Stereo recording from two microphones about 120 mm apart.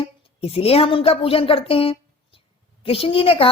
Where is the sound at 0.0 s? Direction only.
55° left (ahead or behind).